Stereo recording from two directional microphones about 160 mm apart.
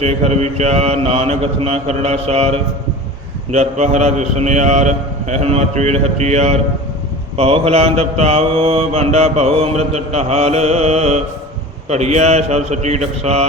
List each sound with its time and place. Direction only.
0.0 s mantra: 40° right (ahead or behind)
3.5 s a man's voice: 45° right (ahead or behind)
7.3 s mantra: 40° right (ahead or behind)
11.9 s a man's voice: 45° right (ahead or behind)